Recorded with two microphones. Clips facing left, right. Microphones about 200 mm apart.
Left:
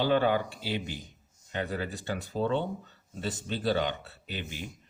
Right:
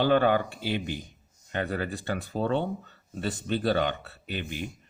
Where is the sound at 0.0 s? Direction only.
55° right (ahead or behind).